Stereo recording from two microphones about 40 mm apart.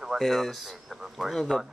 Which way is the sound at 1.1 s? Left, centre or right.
Centre.